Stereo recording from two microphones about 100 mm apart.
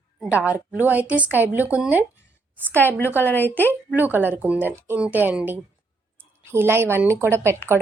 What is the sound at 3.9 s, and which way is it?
A woman's voice, 20° right (ahead or behind).